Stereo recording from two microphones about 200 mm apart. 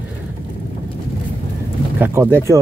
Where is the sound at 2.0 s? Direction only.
10° right (ahead or behind).